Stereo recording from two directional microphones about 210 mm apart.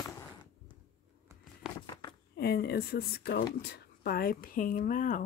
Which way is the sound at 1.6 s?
5° right (ahead or behind).